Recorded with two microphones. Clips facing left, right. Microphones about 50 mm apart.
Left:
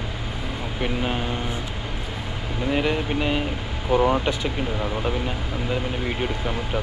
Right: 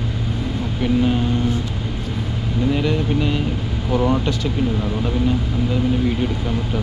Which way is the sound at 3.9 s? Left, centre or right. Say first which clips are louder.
Even; centre.